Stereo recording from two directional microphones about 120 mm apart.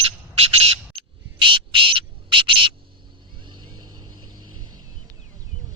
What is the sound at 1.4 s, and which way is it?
Bird, 45° right (ahead or behind).